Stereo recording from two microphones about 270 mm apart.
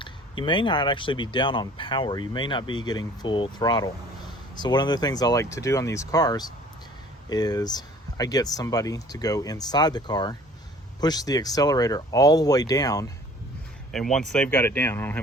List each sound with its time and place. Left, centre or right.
0.0 s speech: centre
13.9 s speech: centre